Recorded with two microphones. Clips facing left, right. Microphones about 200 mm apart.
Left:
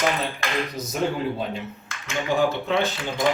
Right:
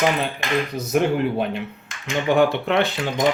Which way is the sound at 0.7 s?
60° right (ahead or behind).